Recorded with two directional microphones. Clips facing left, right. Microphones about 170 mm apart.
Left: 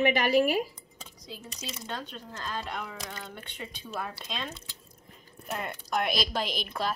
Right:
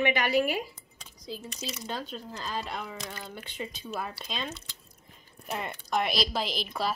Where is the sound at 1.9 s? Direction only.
5° right (ahead or behind).